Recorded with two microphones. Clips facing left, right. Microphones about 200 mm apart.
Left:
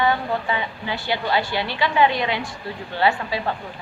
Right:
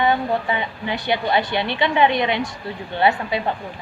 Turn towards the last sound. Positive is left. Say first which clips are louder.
# right 2 dB
turn(degrees=-20)  # may be behind; listen again after turning